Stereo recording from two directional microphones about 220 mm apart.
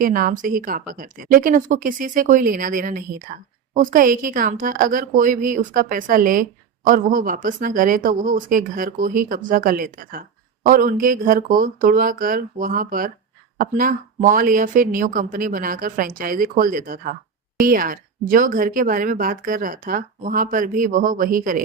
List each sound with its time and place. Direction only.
0.0 s a woman's voice: 40° right (ahead or behind)